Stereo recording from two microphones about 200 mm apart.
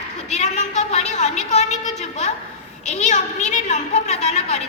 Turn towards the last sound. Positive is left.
turn(degrees=35)  # may be behind; listen again after turning